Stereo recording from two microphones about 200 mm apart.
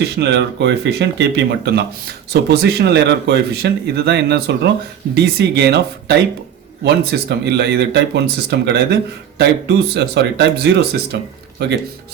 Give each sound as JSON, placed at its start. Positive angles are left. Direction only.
{"t": 0.0, "sound": "speech", "side_deg": -55}